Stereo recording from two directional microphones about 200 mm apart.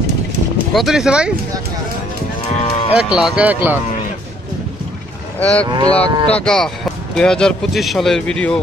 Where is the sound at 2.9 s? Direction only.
5° right (ahead or behind).